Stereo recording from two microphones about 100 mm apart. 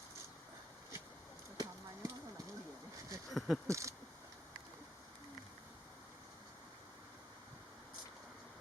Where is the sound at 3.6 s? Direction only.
30° right (ahead or behind).